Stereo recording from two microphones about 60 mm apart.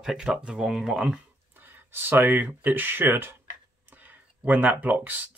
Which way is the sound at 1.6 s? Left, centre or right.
Right.